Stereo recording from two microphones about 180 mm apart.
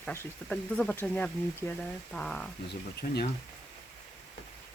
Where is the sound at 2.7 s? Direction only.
65° left (ahead or behind).